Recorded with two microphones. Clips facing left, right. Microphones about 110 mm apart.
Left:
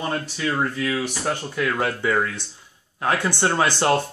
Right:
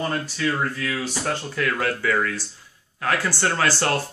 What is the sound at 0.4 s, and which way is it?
Speech, 20° left (ahead or behind).